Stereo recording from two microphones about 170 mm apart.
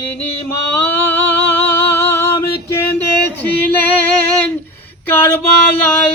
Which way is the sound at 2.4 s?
15° left (ahead or behind).